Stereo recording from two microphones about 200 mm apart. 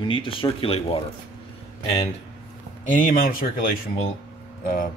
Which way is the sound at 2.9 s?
45° left (ahead or behind).